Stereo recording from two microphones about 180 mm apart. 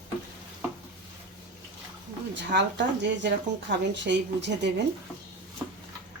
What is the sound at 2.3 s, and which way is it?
Speech, 80° right.